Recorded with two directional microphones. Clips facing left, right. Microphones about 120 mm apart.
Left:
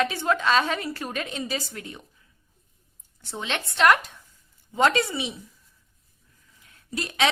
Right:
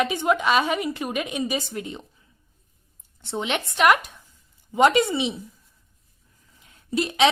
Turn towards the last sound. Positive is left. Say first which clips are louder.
# right 5 dB
turn(degrees=-20)  # may be behind; listen again after turning